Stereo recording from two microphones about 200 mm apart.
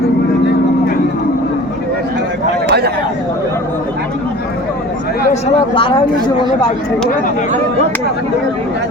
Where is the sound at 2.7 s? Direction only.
55° right (ahead or behind).